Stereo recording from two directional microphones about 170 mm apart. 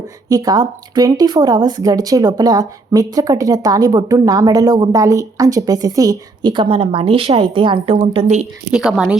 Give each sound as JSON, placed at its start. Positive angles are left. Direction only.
{"t": 0.3, "sound": "speech", "side_deg": -20}
{"t": 8.7, "sound": "a woman's voice", "side_deg": -5}